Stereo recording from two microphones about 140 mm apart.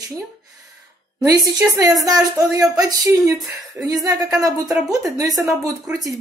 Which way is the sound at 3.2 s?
Centre (ahead or behind).